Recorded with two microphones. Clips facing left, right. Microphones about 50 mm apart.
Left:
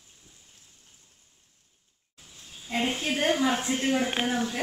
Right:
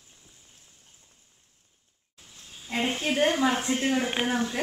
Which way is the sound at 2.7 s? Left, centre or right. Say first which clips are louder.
Right 1 dB; right.